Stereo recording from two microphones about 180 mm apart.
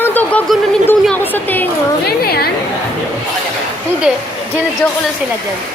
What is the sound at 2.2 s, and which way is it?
Speech, 60° left (ahead or behind).